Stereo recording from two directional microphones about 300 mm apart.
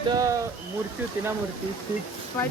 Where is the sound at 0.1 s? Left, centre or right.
Centre.